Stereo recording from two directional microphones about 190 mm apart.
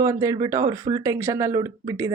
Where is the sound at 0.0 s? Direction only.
15° right (ahead or behind).